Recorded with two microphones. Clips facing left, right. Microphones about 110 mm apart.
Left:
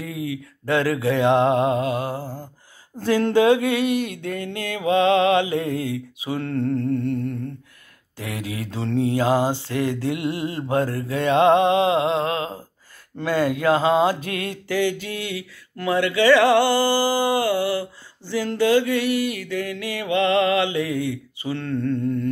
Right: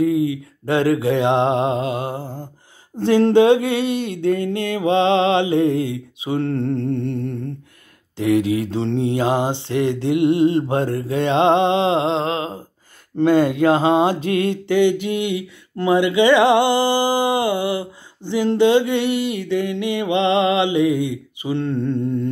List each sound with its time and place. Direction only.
0.0 s mantra: 25° right (ahead or behind)